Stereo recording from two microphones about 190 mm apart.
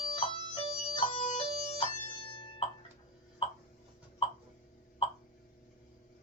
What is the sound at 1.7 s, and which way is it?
Music, 30° left (ahead or behind).